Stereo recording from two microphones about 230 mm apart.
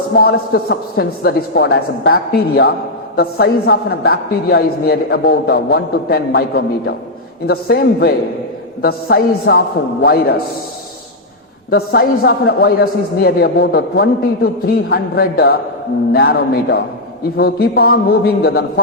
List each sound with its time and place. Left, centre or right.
0.2 s a man's voice: left
11.7 s a man's voice: left